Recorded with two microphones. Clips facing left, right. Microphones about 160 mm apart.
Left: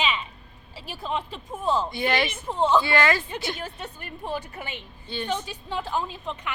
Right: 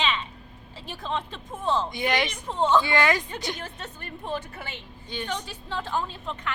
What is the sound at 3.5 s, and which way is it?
A woman's voice, 10° left (ahead or behind).